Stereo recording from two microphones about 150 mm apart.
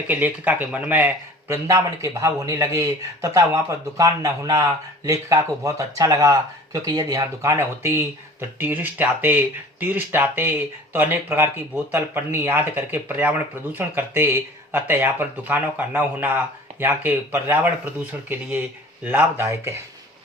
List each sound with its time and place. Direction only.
0.1 s a man's voice: 10° right (ahead or behind)